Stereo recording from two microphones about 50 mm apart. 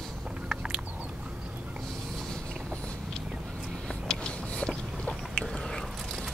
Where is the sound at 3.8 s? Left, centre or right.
Centre.